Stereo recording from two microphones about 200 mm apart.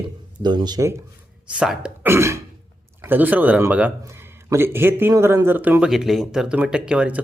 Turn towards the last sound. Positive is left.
turn(degrees=-5)  # may be behind; listen again after turning